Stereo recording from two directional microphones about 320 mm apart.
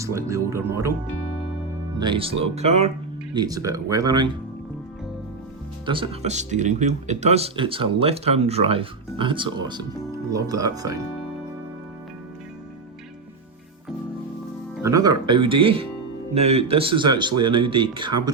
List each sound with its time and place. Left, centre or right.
0.0 s speech: centre
2.0 s speech: centre
5.8 s speech: centre
14.8 s speech: centre